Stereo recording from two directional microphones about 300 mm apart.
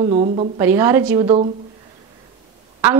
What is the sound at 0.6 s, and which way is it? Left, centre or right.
Speech, centre.